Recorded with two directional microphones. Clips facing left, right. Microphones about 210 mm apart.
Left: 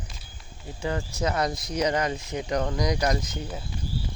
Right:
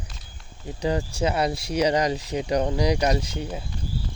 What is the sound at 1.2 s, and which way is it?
Speech, 10° right (ahead or behind).